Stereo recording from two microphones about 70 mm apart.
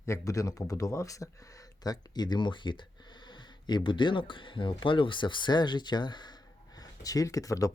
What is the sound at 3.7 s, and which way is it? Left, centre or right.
Speech, left.